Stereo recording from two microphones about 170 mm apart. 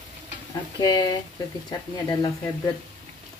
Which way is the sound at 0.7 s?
25° left (ahead or behind).